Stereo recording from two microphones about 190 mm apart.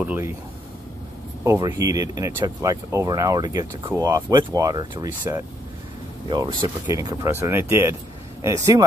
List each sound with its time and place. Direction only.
0.0 s speech: 10° right (ahead or behind)
1.4 s speech: 15° right (ahead or behind)